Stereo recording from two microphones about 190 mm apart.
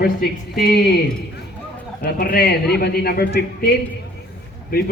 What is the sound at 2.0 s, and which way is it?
A man's voice, 55° left (ahead or behind).